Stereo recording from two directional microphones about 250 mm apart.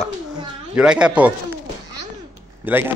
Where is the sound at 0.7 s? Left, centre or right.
Centre.